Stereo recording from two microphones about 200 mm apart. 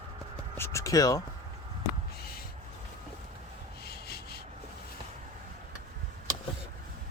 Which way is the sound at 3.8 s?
50° left (ahead or behind).